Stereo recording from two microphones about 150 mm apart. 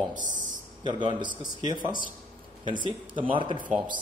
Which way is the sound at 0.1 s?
60° right (ahead or behind).